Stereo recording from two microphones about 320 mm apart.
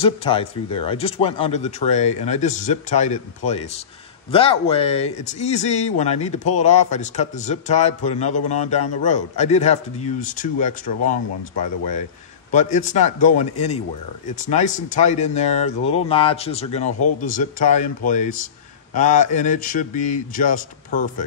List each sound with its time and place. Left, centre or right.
0.0 s speech: centre
12.4 s speech: left